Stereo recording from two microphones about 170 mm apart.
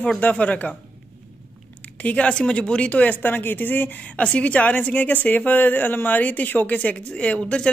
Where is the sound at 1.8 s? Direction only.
10° left (ahead or behind).